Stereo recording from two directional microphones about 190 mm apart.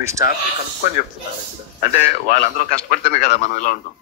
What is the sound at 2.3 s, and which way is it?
A man's voice, 45° left (ahead or behind).